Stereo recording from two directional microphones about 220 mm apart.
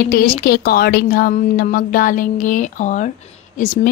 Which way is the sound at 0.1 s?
40° left (ahead or behind).